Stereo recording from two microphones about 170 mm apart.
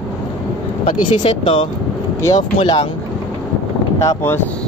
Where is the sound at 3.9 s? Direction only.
15° left (ahead or behind).